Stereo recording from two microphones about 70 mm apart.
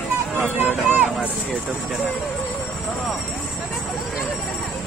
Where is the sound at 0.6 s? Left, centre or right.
Right.